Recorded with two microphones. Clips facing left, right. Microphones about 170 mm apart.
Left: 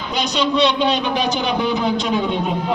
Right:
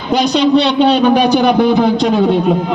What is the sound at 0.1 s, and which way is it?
A man's voice, 65° right (ahead or behind).